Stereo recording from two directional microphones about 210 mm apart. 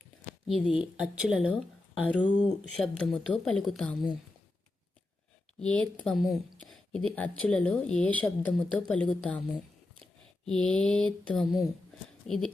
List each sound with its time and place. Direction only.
0.4 s a woman's voice: centre (ahead or behind)
5.5 s a woman's voice: 5° left (ahead or behind)